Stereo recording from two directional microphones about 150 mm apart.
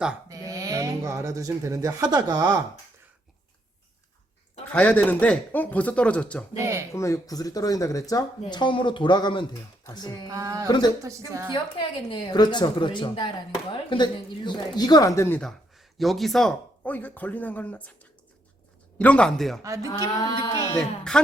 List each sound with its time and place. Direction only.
0.3 s speech: 20° right (ahead or behind)
4.7 s speech: 10° left (ahead or behind)
6.6 s a sound: 20° right (ahead or behind)
6.9 s a woman's voice: 20° left (ahead or behind)
10.2 s a sound: 20° right (ahead or behind)
10.7 s a woman's voice: 30° left (ahead or behind)
16.0 s speech: centre (ahead or behind)
19.6 s a sound: 20° right (ahead or behind)
20.4 s speech: 25° left (ahead or behind)
20.7 s speech: 5° left (ahead or behind)